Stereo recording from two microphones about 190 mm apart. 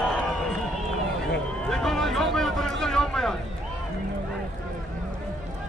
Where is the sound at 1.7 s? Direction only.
Centre (ahead or behind).